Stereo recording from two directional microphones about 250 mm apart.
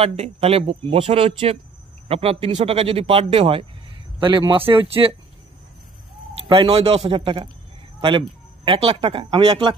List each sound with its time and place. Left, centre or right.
0.0 s speech: right
6.5 s speech: right